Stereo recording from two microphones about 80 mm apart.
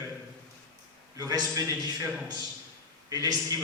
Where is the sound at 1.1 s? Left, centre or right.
Right.